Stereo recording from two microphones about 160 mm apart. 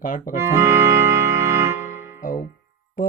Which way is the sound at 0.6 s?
15° right (ahead or behind).